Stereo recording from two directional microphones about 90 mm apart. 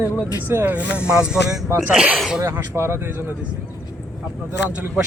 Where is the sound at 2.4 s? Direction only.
30° right (ahead or behind).